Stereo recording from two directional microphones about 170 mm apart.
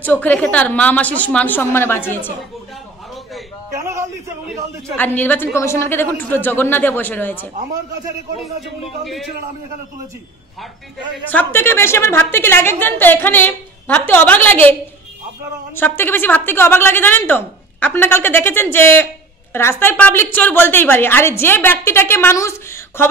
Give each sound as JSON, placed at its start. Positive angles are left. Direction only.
{"t": 0.0, "sound": "a woman's voice", "side_deg": 10}
{"t": 3.8, "sound": "a sound", "side_deg": -15}
{"t": 4.9, "sound": "a woman's voice", "side_deg": 10}
{"t": 9.0, "sound": "a man's voice", "side_deg": 0}
{"t": 11.2, "sound": "a woman's voice", "side_deg": 10}